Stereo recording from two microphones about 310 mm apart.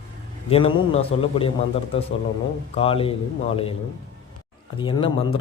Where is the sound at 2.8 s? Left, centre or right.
Centre.